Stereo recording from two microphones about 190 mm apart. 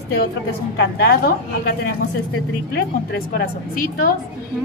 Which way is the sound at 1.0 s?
60° left (ahead or behind).